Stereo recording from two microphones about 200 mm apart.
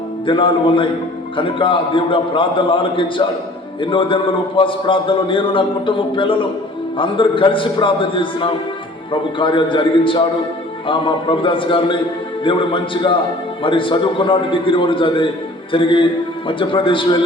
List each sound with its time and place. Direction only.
0.3 s a man's voice: 25° left (ahead or behind)